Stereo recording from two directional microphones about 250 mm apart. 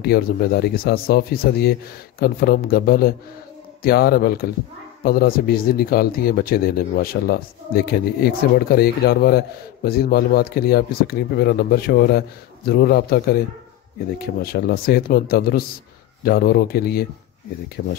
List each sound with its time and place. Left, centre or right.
0.0 s speech: left